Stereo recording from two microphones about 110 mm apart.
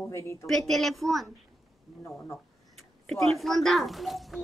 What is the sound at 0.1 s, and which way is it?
Speech, 25° left (ahead or behind).